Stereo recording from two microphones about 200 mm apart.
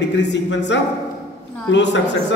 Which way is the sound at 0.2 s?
60° left (ahead or behind).